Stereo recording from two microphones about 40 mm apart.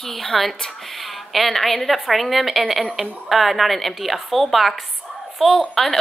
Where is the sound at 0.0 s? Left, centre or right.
Centre.